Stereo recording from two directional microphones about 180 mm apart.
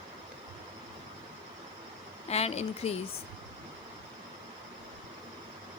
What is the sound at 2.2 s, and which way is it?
Speech, 35° left (ahead or behind).